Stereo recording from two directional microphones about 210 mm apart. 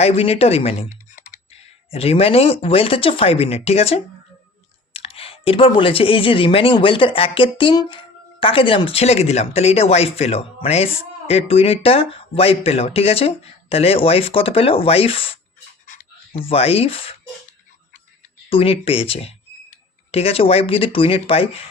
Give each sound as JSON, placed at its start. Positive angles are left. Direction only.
{"t": 0.0, "sound": "speech", "side_deg": 30}
{"t": 16.4, "sound": "speech", "side_deg": 25}
{"t": 18.4, "sound": "speech", "side_deg": 25}